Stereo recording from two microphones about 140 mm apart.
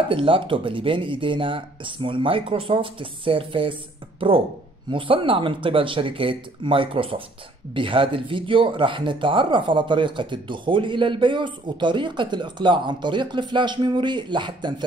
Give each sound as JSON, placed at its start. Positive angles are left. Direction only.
{"t": 0.1, "sound": "speech", "side_deg": -40}
{"t": 4.9, "sound": "speech", "side_deg": -40}